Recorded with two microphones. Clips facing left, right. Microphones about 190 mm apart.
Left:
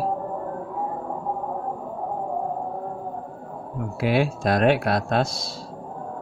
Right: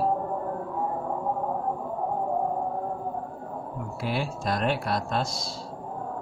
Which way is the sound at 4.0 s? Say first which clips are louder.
Left 9 dB; 70° left (ahead or behind).